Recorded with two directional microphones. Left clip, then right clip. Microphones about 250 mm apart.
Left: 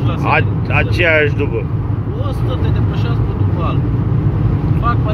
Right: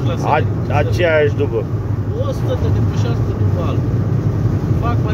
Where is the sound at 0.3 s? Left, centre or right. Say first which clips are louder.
Left 2 dB; centre.